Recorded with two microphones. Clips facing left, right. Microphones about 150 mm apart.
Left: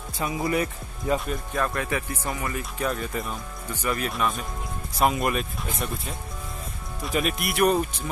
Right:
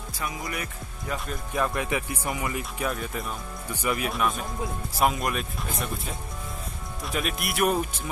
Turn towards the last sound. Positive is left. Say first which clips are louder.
# left 3 dB
turn(degrees=-5)  # may be behind; listen again after turning